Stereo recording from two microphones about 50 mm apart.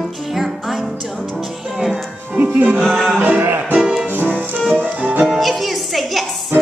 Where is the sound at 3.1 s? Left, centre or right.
Right.